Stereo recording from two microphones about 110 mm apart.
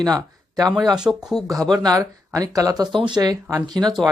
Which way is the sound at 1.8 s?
35° right (ahead or behind).